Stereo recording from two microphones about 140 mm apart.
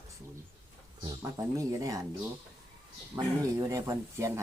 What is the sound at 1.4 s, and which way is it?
Speech, 25° right (ahead or behind).